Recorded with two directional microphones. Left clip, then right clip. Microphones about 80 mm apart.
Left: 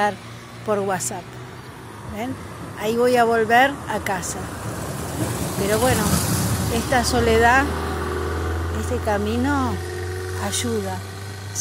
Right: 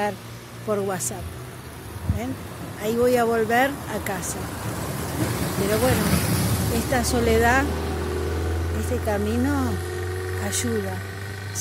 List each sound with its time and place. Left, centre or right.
0.7 s speech: centre
2.8 s speech: centre
4.5 s vehicle: left
5.9 s a sound: left
6.9 s vehicle: centre; by 10.3 s left
10.4 s speech: centre
10.7 s speech: left